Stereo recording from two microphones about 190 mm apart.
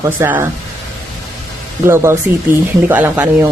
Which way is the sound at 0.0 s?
10° right (ahead or behind).